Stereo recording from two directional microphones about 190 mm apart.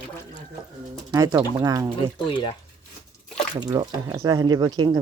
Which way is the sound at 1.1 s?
20° right (ahead or behind).